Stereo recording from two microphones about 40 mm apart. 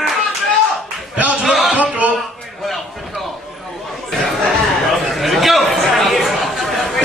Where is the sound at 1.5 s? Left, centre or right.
Centre.